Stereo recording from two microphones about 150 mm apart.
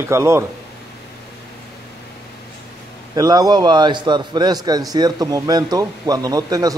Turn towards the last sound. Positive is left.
turn(degrees=-25)  # may be behind; listen again after turning